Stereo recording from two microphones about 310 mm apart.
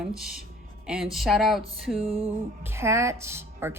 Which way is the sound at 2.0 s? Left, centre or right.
Centre.